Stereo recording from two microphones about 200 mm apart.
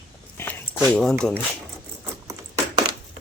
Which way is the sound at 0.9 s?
5° left (ahead or behind).